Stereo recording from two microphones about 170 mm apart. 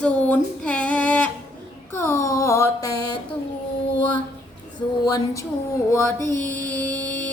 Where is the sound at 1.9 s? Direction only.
15° left (ahead or behind).